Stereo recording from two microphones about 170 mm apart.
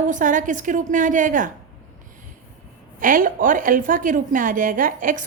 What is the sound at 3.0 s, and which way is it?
A woman's voice, 55° right (ahead or behind).